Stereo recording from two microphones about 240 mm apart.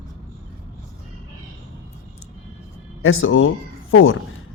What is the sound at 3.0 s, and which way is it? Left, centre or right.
Speech, left.